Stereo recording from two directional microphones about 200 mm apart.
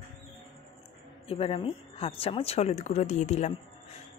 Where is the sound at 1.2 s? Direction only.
30° left (ahead or behind).